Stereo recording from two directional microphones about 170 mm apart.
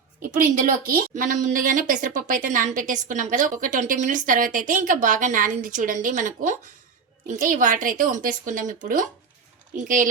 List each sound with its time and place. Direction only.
0.2 s a woman's voice: 55° right (ahead or behind)